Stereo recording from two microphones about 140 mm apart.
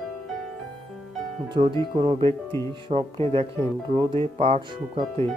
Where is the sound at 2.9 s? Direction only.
40° right (ahead or behind).